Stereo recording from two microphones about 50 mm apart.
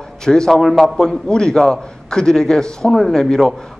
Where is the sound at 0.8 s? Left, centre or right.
Centre.